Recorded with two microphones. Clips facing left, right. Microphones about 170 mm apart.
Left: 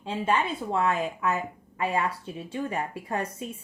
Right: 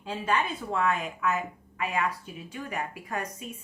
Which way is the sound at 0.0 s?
25° left (ahead or behind).